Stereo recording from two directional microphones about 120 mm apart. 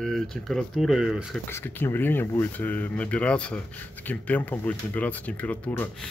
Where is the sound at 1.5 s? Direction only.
20° left (ahead or behind).